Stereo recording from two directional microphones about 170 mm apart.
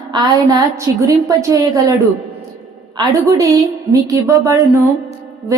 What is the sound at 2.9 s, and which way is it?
A woman's voice, 20° right (ahead or behind).